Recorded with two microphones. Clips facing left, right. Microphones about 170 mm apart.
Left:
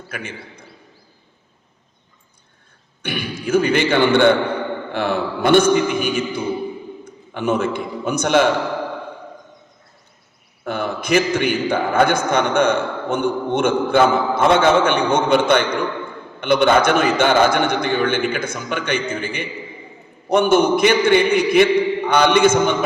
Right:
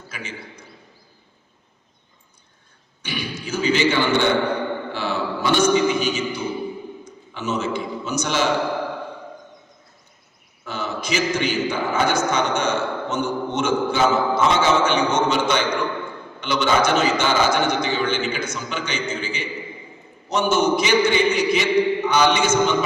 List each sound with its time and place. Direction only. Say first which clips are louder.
0.1 s a man's voice: left 3 dB; 55° left (ahead or behind)
3.0 s a man's voice: left 4 dB; 55° left (ahead or behind)
10.6 s a man's voice: left 5 dB; 55° left (ahead or behind)